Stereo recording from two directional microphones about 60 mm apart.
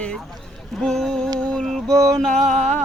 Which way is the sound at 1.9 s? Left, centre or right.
Right.